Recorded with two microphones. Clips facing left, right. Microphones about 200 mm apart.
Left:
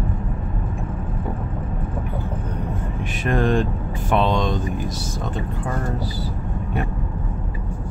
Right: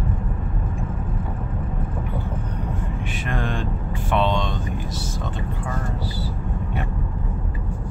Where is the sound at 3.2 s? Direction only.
40° left (ahead or behind).